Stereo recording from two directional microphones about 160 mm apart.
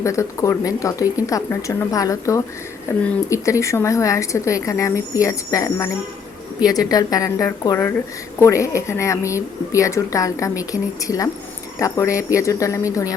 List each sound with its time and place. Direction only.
0.0 s a woman's voice: 20° left (ahead or behind)